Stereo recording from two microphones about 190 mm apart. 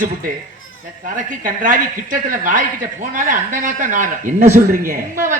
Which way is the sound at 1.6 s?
45° right (ahead or behind).